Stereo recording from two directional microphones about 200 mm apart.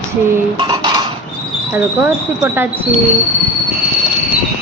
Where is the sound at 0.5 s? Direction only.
25° right (ahead or behind).